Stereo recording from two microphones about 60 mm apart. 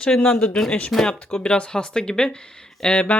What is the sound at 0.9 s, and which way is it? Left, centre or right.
Speech, centre.